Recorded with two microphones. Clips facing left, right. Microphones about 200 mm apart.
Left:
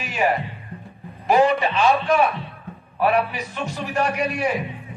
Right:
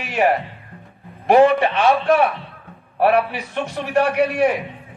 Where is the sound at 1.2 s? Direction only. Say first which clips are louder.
Right 4 dB; 60° right (ahead or behind).